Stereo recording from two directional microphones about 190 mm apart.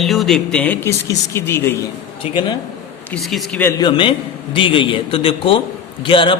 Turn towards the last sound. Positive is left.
turn(degrees=25)  # may be behind; listen again after turning